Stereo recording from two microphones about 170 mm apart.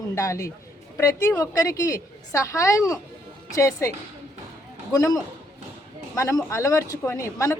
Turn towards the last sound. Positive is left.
turn(degrees=20)  # may be behind; listen again after turning